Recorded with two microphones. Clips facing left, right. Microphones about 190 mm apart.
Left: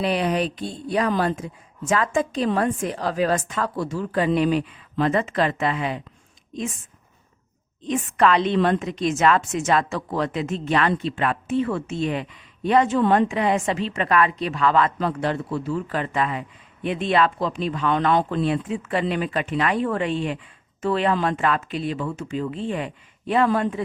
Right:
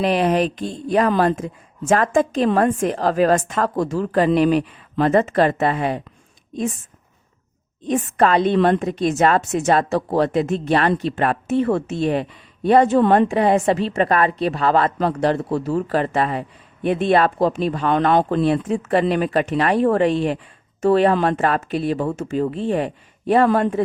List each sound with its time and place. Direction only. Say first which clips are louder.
0.0 s speech: right 5 dB; 45° right (ahead or behind)
7.9 s a woman's voice: right 2 dB; 40° right (ahead or behind); by 18.4 s 60° right (ahead or behind)
18.5 s speech: right 6 dB; 45° right (ahead or behind)
23.5 s speech: right 4 dB; 55° right (ahead or behind)